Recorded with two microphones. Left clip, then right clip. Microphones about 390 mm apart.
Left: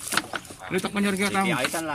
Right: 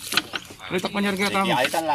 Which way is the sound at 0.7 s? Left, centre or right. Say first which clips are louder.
Right 2 dB; centre.